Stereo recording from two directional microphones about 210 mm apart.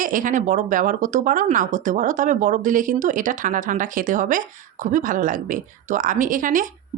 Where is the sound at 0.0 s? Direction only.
40° right (ahead or behind).